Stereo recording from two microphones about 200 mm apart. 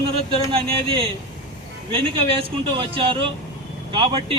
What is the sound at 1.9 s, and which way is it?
Speech, 25° right (ahead or behind).